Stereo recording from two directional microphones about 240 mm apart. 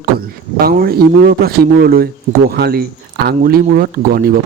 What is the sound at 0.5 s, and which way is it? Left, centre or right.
Speech, right.